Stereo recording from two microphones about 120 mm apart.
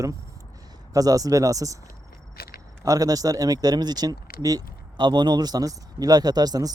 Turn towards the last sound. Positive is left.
turn(degrees=-30)  # may be behind; listen again after turning